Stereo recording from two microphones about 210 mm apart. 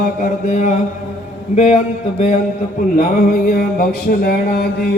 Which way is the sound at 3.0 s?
40° left (ahead or behind).